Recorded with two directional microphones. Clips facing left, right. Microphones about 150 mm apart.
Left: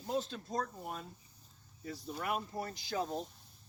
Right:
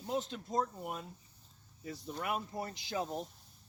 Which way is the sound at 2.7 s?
20° right (ahead or behind).